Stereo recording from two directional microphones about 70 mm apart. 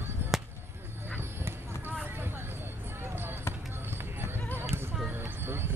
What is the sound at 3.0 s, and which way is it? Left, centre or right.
Basketball bounce, right.